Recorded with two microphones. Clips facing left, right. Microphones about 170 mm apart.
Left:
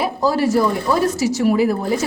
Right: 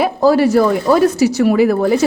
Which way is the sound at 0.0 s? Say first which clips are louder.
Right 6 dB; 65° right (ahead or behind).